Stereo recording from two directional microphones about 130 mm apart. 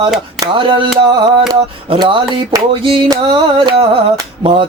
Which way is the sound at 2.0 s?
35° right (ahead or behind).